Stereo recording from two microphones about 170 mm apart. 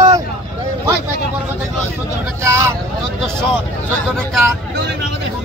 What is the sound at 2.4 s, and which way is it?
Speech, 15° right (ahead or behind).